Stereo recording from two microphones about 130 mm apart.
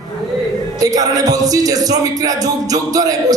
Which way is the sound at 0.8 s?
30° right (ahead or behind).